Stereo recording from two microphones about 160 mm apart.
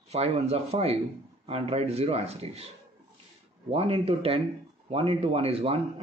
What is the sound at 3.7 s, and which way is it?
Speech, 40° right (ahead or behind).